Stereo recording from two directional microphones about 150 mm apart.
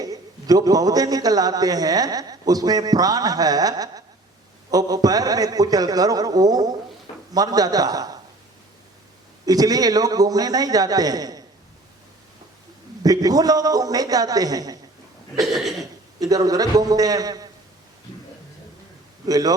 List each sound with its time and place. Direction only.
0.0 s a man's voice: 25° right (ahead or behind)
9.5 s a man's voice: 25° right (ahead or behind)
13.0 s a man's voice: 25° right (ahead or behind)
15.4 s a sound: centre (ahead or behind)
16.2 s a man's voice: 25° right (ahead or behind)
19.2 s a man's voice: 25° right (ahead or behind)